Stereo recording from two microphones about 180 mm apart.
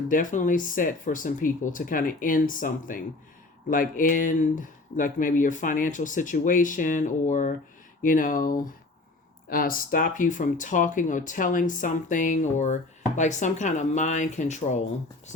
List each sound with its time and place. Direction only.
0.1 s speech: 45° left (ahead or behind)